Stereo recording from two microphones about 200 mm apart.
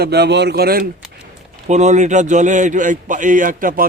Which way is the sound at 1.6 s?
35° right (ahead or behind).